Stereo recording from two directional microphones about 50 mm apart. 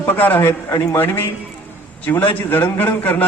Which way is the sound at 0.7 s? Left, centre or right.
Left.